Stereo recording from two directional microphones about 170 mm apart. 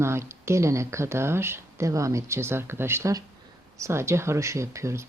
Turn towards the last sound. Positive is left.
turn(degrees=-15)  # may be behind; listen again after turning